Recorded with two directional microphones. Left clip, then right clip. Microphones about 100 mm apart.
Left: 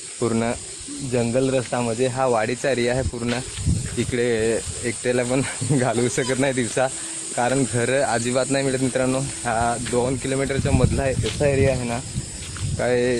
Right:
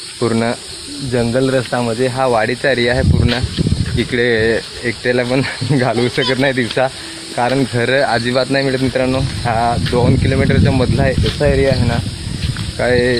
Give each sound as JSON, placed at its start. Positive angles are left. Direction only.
{"t": 0.2, "sound": "speech", "side_deg": 5}
{"t": 2.0, "sound": "speech", "side_deg": 10}
{"t": 3.0, "sound": "speech", "side_deg": 0}
{"t": 3.9, "sound": "speech", "side_deg": 20}